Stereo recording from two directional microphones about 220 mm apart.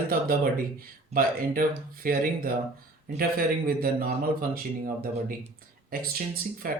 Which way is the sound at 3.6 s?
40° right (ahead or behind).